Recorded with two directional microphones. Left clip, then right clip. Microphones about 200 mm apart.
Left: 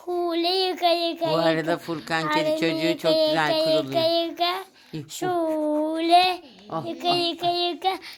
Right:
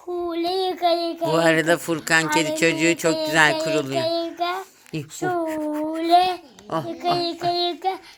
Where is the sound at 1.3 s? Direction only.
5° right (ahead or behind).